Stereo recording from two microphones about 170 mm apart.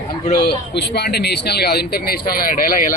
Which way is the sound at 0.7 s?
80° left.